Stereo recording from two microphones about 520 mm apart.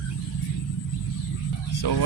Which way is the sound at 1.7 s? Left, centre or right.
Left.